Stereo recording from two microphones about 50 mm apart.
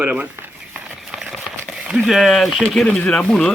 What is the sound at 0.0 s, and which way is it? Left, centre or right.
Speech, right.